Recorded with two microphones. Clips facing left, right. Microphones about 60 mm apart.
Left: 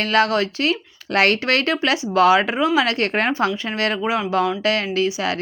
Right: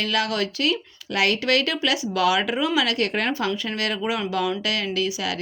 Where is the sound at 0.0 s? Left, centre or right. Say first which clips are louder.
Left 6 dB; left.